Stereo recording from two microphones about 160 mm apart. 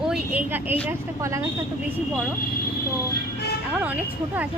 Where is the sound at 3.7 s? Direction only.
10° right (ahead or behind).